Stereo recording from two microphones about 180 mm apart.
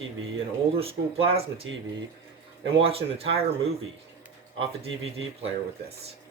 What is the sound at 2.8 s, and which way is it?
Speech, 30° right (ahead or behind).